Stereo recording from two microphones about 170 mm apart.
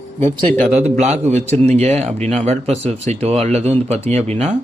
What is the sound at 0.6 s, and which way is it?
Speech, 40° right (ahead or behind).